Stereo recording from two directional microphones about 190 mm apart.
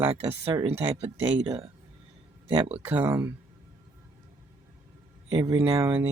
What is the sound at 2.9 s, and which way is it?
Speech, 10° right (ahead or behind).